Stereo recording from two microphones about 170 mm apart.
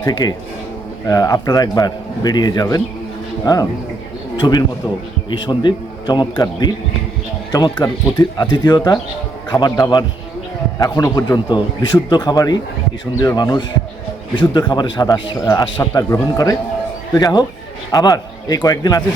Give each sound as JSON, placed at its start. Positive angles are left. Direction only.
{"t": 0.0, "sound": "a man's voice", "side_deg": 25}